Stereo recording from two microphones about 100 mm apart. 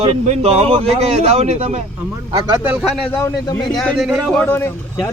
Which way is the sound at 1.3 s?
90° right.